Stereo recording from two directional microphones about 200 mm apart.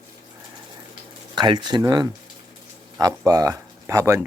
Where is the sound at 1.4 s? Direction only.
20° right (ahead or behind).